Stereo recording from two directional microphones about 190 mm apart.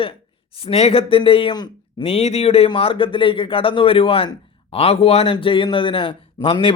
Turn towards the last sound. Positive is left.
turn(degrees=25)  # may be behind; listen again after turning